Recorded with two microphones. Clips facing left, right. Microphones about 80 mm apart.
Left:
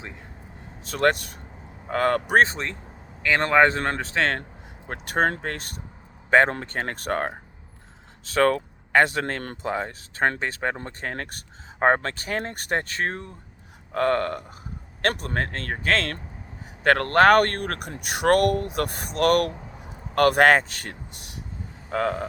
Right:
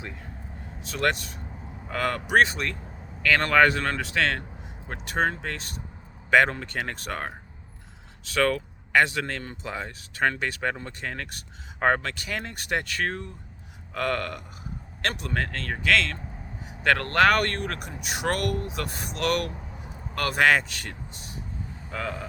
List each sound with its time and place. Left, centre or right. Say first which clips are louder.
0.8 s speech: left 4 dB; left
4.9 s speech: left 3 dB; left
6.3 s speech: left 2 dB; left
15.0 s speech: left 3 dB; left
21.8 s speech: left 8 dB; left